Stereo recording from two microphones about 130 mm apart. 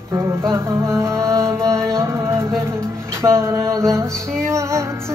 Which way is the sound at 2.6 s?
20° right (ahead or behind).